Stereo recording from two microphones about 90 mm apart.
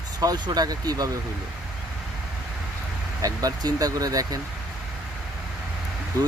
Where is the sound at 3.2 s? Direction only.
45° right (ahead or behind).